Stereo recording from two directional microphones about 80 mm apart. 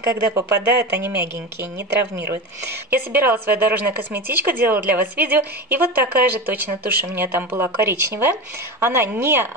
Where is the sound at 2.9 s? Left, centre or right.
Right.